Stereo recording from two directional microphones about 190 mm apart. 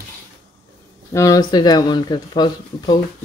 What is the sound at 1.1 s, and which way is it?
Speech, 20° left (ahead or behind).